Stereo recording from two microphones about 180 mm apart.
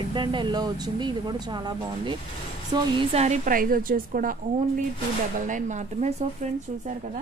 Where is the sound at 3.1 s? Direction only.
40° right (ahead or behind).